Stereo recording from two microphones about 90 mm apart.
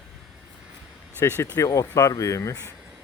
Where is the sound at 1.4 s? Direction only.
40° left (ahead or behind).